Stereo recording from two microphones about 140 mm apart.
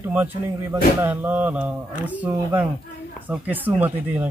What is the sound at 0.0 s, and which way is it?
Speech, 15° right (ahead or behind).